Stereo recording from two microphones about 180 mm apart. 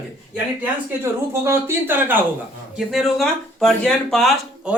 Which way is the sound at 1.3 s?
15° right (ahead or behind).